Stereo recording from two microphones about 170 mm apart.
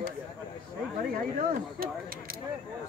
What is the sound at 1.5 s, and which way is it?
Speech, 60° right (ahead or behind).